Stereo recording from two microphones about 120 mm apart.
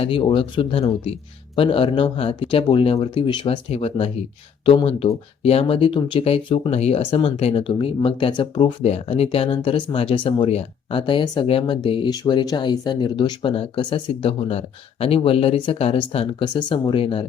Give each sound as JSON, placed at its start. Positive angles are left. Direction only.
{"t": 0.0, "sound": "speech", "side_deg": 50}
{"t": 8.9, "sound": "speech", "side_deg": 60}
{"t": 16.4, "sound": "speech", "side_deg": 40}